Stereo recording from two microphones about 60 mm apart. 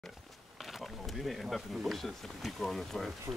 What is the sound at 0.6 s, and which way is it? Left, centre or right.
Speech, centre.